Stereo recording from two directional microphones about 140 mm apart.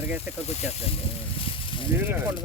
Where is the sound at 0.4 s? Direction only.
50° left (ahead or behind).